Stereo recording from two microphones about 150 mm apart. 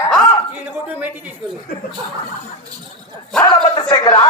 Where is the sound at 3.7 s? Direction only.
30° left (ahead or behind).